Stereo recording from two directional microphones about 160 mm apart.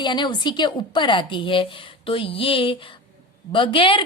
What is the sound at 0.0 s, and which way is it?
A woman's voice, 30° left (ahead or behind).